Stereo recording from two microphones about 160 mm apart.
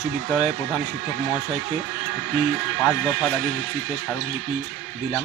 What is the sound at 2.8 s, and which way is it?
Speech, 5° left (ahead or behind).